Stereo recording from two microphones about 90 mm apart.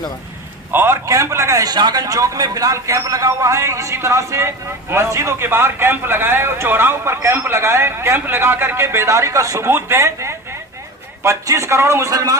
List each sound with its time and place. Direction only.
0.7 s a man's voice: 25° right (ahead or behind)
1.0 s a man's voice: 35° right (ahead or behind)
1.6 s a man's voice: 50° right (ahead or behind)